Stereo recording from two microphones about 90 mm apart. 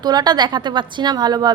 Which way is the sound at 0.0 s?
50° right (ahead or behind).